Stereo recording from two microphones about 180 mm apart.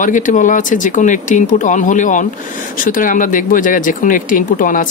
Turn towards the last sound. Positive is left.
turn(degrees=45)  # may be behind; listen again after turning